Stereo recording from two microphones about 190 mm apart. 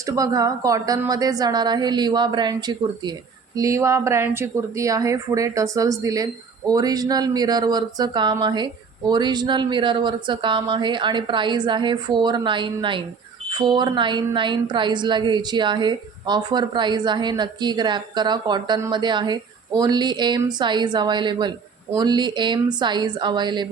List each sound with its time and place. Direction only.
0.0 s a woman's voice: 20° right (ahead or behind)